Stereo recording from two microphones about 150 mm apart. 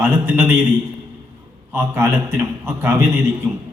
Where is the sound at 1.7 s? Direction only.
15° right (ahead or behind).